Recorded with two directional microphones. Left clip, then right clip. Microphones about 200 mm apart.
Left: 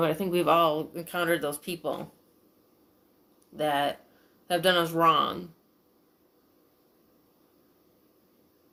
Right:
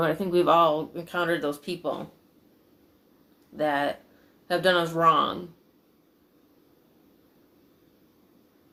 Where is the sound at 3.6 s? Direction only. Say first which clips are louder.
Right 1 dB; 45° left (ahead or behind).